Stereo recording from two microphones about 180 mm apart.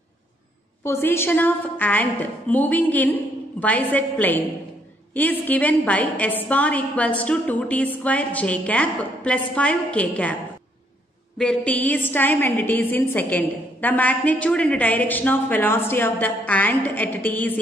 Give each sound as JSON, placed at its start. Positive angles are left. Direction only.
{"t": 0.8, "sound": "a woman's voice", "side_deg": 15}
{"t": 11.3, "sound": "a woman's voice", "side_deg": 5}